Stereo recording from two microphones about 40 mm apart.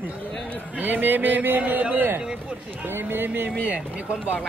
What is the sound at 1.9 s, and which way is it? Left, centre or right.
Speech, right.